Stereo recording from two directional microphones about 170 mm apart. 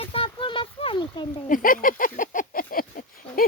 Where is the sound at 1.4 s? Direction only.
55° left (ahead or behind).